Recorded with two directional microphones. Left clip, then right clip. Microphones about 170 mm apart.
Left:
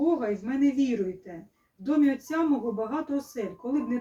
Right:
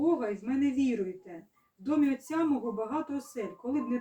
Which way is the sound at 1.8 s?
20° right (ahead or behind).